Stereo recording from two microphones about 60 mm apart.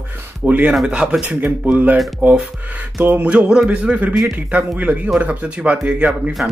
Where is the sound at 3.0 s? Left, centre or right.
Right.